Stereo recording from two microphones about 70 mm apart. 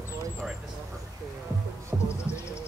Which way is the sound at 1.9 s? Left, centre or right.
Centre.